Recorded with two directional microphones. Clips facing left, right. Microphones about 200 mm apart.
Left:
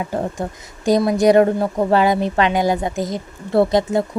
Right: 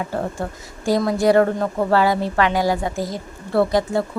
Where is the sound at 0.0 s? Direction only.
15° left (ahead or behind).